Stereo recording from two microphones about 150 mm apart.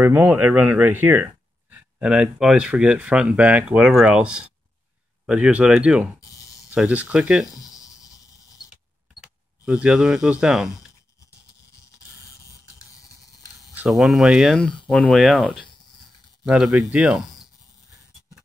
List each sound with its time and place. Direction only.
0.0 s speech: 10° right (ahead or behind)
7.5 s a sound: 25° left (ahead or behind)
9.7 s speech: 5° right (ahead or behind)
13.7 s speech: 5° right (ahead or behind)